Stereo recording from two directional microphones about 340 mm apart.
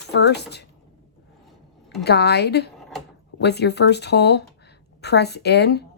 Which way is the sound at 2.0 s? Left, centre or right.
Left.